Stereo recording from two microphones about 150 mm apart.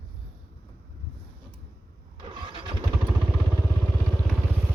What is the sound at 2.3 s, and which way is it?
Vehicle, 35° right (ahead or behind).